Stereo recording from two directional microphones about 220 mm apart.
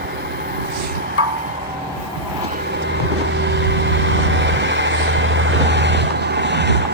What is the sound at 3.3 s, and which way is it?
Vehicle, 50° right (ahead or behind).